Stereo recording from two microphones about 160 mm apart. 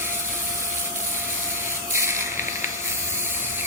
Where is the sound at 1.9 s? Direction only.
15° right (ahead or behind).